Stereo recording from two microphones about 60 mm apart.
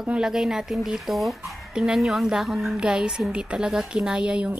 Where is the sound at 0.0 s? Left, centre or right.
Centre.